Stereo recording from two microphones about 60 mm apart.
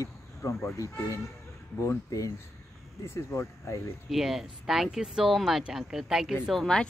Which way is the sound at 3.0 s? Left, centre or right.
Left.